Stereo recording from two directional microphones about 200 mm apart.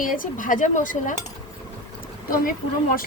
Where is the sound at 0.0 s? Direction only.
45° left (ahead or behind).